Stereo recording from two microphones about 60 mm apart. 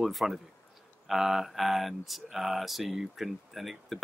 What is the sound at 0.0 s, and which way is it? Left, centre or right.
Speech, centre.